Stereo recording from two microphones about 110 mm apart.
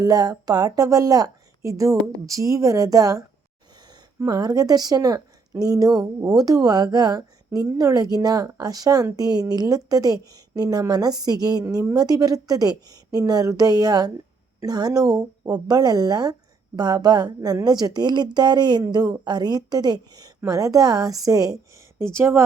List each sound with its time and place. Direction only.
0.0 s a woman's voice: 35° right (ahead or behind)
3.8 s a sound: 40° right (ahead or behind)
4.3 s a woman's voice: 35° right (ahead or behind)